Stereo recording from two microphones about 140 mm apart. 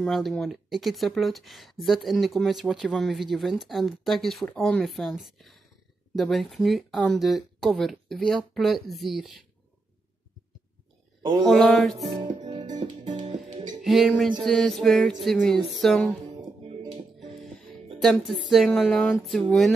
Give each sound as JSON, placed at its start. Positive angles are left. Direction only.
{"t": 0.0, "sound": "speech", "side_deg": 0}
{"t": 11.4, "sound": "speech", "side_deg": 5}
{"t": 12.1, "sound": "music", "side_deg": -35}
{"t": 13.8, "sound": "speech", "side_deg": 0}
{"t": 17.2, "sound": "music", "side_deg": 0}
{"t": 17.9, "sound": "speech", "side_deg": 0}